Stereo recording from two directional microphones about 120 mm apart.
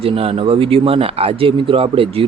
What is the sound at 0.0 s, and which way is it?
Speech, 55° right (ahead or behind).